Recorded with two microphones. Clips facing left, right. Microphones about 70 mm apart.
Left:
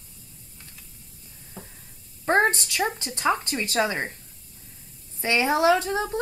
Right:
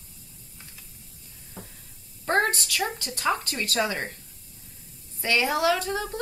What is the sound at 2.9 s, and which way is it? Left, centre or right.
Speech, left.